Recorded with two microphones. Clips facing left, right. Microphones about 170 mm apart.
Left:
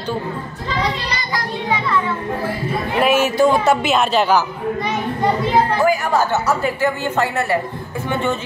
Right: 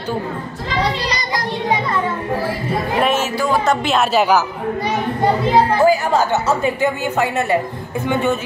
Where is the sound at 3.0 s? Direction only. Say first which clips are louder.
Left 7 dB; 10° left (ahead or behind); by 4.4 s 5° right (ahead or behind).